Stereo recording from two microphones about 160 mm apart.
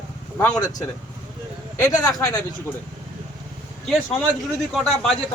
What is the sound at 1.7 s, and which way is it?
Speech, 20° left (ahead or behind).